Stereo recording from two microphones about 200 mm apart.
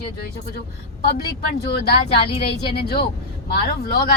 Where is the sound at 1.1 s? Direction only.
50° left (ahead or behind).